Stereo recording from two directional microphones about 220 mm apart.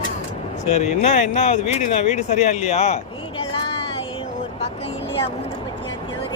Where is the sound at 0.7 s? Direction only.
30° left (ahead or behind).